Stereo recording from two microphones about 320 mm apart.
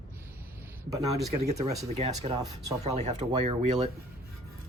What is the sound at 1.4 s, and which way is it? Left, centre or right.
Speech, right.